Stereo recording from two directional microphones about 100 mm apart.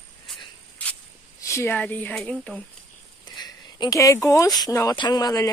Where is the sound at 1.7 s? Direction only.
15° left (ahead or behind).